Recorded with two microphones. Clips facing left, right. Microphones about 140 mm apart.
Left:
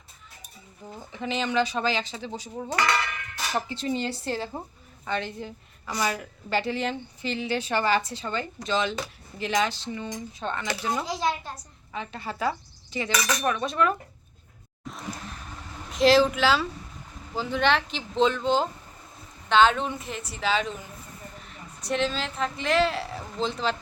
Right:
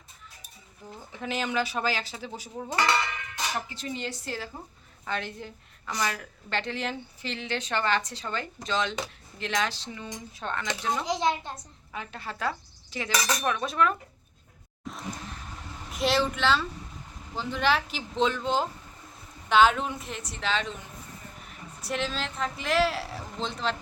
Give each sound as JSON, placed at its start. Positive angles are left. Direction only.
{"t": 1.1, "sound": "a woman's voice", "side_deg": -5}
{"t": 3.5, "sound": "speech", "side_deg": 30}
{"t": 5.0, "sound": "a woman's voice", "side_deg": 0}
{"t": 11.0, "sound": "speech", "side_deg": -20}
{"t": 11.5, "sound": "a woman's voice", "side_deg": 0}
{"t": 13.1, "sound": "speech", "side_deg": -30}
{"t": 13.4, "sound": "a woman's voice", "side_deg": 0}
{"t": 15.9, "sound": "a woman's voice", "side_deg": 0}
{"t": 21.8, "sound": "a woman's voice", "side_deg": -5}